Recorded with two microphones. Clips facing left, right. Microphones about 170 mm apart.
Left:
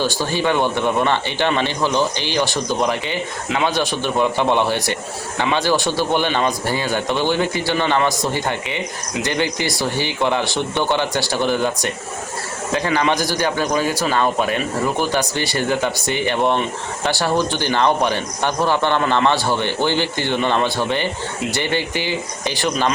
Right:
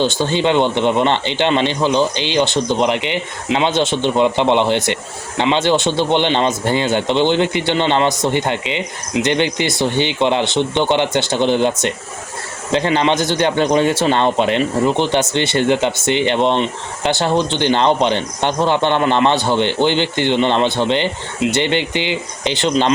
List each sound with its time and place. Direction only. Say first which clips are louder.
0.0 s a man's voice: right 4 dB; 20° right (ahead or behind)